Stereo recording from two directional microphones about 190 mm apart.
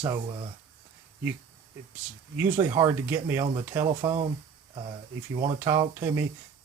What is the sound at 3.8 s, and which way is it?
Speech, 30° right (ahead or behind).